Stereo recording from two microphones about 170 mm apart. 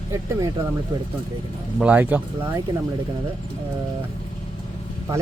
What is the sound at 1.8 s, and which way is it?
Speech, 10° right (ahead or behind).